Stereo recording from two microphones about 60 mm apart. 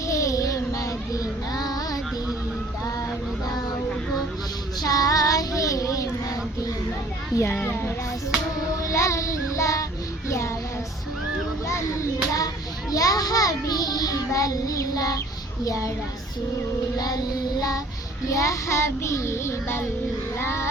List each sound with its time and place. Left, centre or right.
0.1 s child singing: left
4.8 s child singing: left
7.6 s child singing: left
8.8 s child singing: left
11.7 s children playing: left
12.9 s child singing: left
15.6 s a child's voice: left
18.3 s child singing: left